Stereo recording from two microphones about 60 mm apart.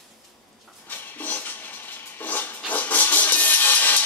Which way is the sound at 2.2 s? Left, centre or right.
Left.